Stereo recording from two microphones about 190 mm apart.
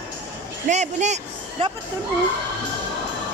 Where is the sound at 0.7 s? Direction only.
35° right (ahead or behind).